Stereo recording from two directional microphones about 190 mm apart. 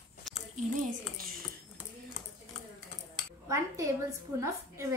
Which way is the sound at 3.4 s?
15° right (ahead or behind).